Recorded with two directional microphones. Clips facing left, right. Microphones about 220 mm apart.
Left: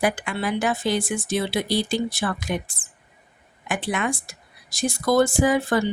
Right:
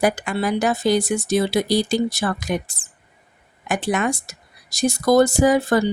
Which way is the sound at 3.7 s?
45° right (ahead or behind).